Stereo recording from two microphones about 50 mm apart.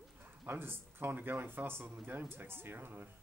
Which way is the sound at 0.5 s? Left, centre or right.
Right.